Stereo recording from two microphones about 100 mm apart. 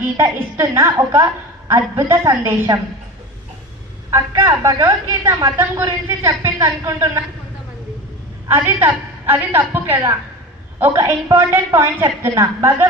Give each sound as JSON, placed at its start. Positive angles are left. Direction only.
{"t": 0.2, "sound": "a woman's voice", "side_deg": -30}
{"t": 4.1, "sound": "a woman's voice", "side_deg": -30}
{"t": 8.4, "sound": "a woman's voice", "side_deg": -25}